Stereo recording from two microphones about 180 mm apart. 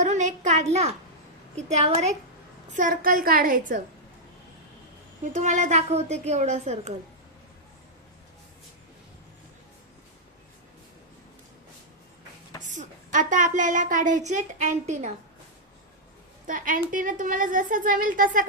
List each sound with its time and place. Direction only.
0.0 s a child's voice: 40° right (ahead or behind)
2.7 s a woman's voice: 50° right (ahead or behind)
5.3 s a woman's voice: 40° right (ahead or behind)
12.6 s a woman's voice: 45° right (ahead or behind)
16.5 s a woman's voice: 45° right (ahead or behind)